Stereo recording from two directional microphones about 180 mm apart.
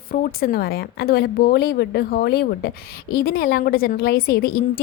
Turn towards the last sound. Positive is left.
turn(degrees=55)  # may be behind; listen again after turning